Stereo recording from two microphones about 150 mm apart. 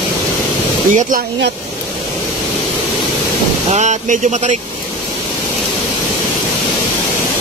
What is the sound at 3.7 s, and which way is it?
Speech, 50° right (ahead or behind).